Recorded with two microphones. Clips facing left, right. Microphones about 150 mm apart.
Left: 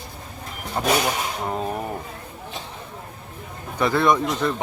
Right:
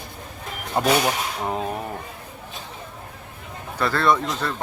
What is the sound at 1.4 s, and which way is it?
Speech, centre (ahead or behind).